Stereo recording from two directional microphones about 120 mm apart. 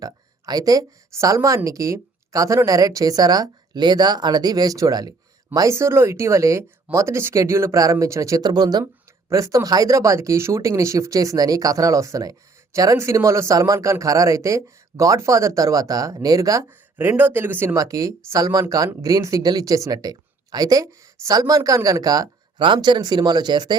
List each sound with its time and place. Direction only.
0.0 s speech: 30° right (ahead or behind)
16.6 s speech: 20° right (ahead or behind)
17.7 s speech: 30° right (ahead or behind)